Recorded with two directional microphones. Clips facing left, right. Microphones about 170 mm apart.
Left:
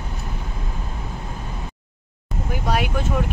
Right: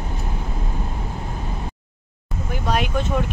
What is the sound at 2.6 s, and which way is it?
Vehicle, 5° left (ahead or behind).